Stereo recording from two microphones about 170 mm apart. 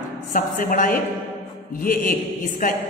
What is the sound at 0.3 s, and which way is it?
A woman's voice, 55° left (ahead or behind).